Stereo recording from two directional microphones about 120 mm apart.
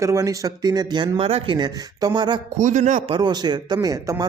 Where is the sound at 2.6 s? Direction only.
90° right.